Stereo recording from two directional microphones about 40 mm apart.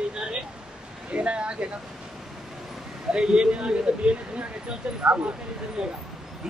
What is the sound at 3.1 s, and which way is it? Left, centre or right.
Speech, right.